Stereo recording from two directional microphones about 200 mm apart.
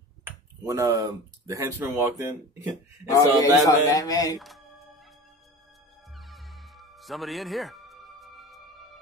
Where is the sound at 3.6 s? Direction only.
15° left (ahead or behind).